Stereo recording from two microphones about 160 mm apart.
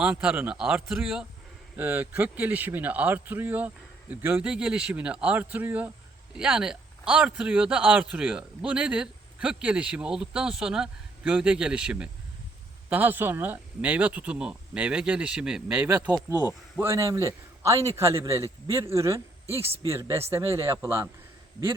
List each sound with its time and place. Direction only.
0.0 s a man's voice: 5° right (ahead or behind)